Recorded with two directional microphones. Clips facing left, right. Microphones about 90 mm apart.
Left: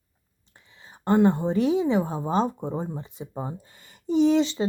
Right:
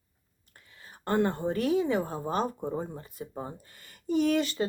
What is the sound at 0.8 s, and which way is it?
Speech, 20° left (ahead or behind).